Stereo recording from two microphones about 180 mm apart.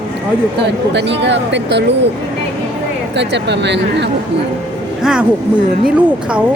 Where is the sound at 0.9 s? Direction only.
75° right (ahead or behind).